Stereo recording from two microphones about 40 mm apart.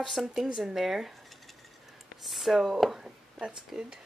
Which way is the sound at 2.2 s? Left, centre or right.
Centre.